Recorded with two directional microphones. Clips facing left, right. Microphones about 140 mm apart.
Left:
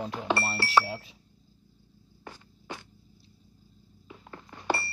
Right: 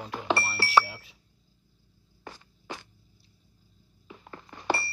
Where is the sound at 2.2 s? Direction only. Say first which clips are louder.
Right 1 dB; 90° right.